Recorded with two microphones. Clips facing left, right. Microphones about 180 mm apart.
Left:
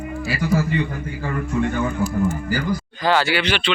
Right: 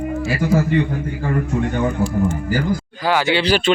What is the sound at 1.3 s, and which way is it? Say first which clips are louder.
Speech: right 1 dB; 40° right (ahead or behind).